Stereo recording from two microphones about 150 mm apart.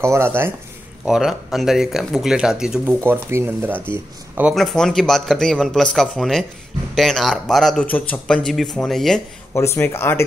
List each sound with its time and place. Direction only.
0.0 s speech: 15° right (ahead or behind)
1.0 s speech: centre (ahead or behind)
2.9 s speech: 15° right (ahead or behind)
4.6 s speech: centre (ahead or behind)
9.5 s speech: 15° left (ahead or behind)